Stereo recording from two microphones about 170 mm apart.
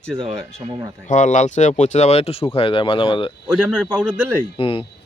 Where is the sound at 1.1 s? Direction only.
45° left (ahead or behind).